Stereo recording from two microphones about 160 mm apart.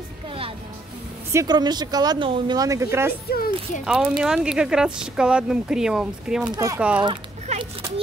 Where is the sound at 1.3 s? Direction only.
20° right (ahead or behind).